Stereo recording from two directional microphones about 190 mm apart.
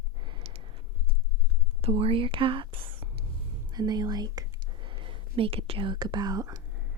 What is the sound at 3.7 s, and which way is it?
Speech, 20° right (ahead or behind).